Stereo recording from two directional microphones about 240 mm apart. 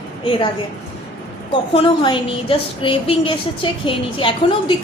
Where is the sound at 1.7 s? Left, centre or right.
Left.